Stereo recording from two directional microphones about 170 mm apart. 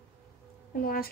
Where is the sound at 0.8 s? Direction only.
60° left (ahead or behind).